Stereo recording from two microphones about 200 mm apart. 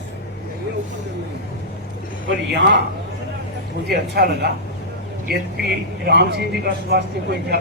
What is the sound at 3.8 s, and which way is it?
Speech, 55° right (ahead or behind).